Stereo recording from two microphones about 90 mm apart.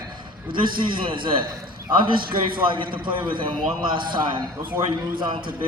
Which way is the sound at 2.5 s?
65° right (ahead or behind).